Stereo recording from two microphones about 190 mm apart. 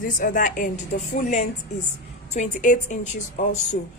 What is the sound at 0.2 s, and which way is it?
Speech, 45° left (ahead or behind).